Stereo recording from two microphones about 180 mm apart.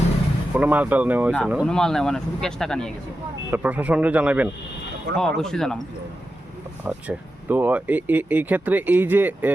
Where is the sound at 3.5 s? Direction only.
10° right (ahead or behind).